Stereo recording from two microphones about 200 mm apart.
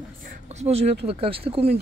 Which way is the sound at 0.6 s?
30° right (ahead or behind).